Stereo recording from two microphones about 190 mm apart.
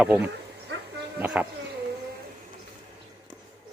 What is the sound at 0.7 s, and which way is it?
Bow-wow, 70° right (ahead or behind).